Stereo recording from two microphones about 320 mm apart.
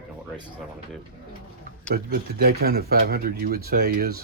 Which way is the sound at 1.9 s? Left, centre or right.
Right.